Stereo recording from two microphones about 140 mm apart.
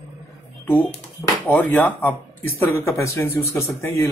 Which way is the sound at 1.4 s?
10° left (ahead or behind).